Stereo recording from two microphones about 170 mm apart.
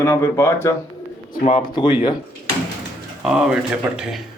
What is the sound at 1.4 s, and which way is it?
Speech, 30° left (ahead or behind).